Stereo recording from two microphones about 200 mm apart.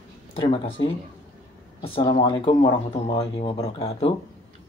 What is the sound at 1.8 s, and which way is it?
Speech, 25° left (ahead or behind).